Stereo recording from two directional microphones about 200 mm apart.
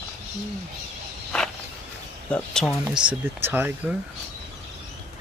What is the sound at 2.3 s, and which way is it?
Speech, centre (ahead or behind).